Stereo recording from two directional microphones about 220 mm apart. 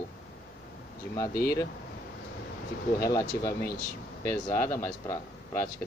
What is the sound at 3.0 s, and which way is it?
Speech, 15° left (ahead or behind).